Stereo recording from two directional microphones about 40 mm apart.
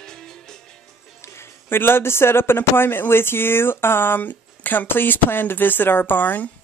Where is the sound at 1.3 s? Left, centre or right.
Left.